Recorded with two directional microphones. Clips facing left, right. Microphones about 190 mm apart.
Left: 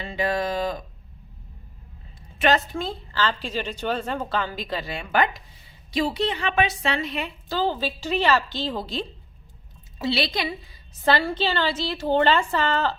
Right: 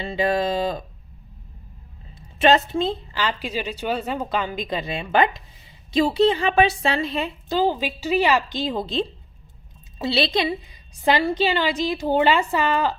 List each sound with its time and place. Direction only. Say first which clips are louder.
0.0 s a sound: right 4 dB; 25° right (ahead or behind)
2.4 s a woman's voice: right 4 dB; 25° right (ahead or behind)
7.5 s a woman's voice: right 3 dB; 15° right (ahead or behind)